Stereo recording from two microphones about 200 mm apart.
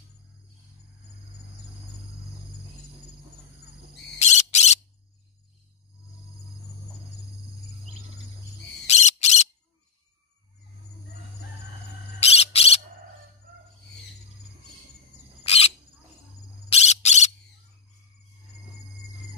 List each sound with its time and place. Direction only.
4.2 s bird: 35° left (ahead or behind)
8.8 s bird: 35° left (ahead or behind)
12.2 s bird: 30° left (ahead or behind)
15.4 s cricket: 30° left (ahead or behind)
16.6 s bird: 35° left (ahead or behind)